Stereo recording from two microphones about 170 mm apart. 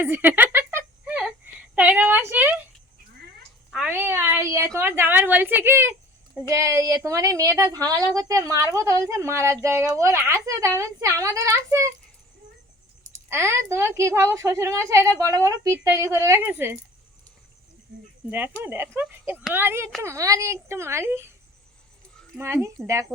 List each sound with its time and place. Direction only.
0.0 s a sound: 10° right (ahead or behind)
3.8 s a woman's voice: 10° right (ahead or behind)
13.2 s a woman's voice: 15° right (ahead or behind)
18.3 s a woman's voice: 10° right (ahead or behind)
22.4 s a woman's voice: 15° right (ahead or behind)